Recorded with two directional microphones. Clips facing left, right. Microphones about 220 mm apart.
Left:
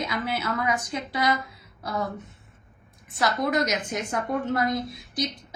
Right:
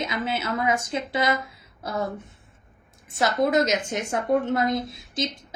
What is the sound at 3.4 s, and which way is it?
A woman's voice, 25° right (ahead or behind).